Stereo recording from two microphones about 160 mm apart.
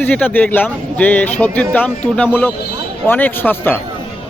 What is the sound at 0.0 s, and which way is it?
Speech, 10° left (ahead or behind).